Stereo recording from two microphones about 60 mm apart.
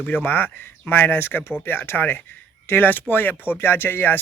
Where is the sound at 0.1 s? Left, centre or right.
Left.